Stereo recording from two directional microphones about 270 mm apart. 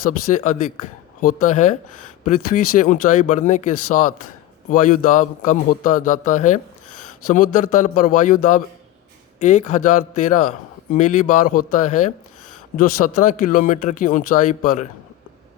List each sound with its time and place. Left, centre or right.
0.0 s a man's voice: left